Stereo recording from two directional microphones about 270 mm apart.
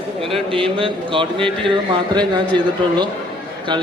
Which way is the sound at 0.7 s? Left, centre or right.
Centre.